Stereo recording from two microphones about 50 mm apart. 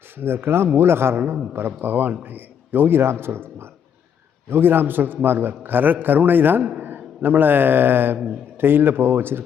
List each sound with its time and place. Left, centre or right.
0.2 s a man's voice: right